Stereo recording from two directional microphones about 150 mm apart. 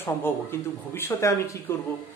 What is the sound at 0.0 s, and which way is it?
Speech, 15° left (ahead or behind).